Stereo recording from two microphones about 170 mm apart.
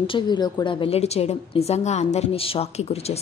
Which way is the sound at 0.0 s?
30° left (ahead or behind).